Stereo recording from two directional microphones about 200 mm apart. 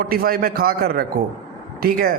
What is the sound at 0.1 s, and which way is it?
A man's voice, 50° right (ahead or behind).